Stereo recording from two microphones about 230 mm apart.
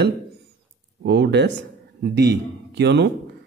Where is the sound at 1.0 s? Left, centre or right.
Right.